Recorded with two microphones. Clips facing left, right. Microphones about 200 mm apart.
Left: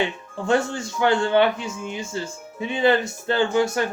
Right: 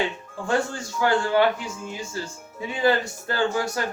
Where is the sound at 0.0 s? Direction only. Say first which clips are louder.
Left 2 dB; 25° left (ahead or behind).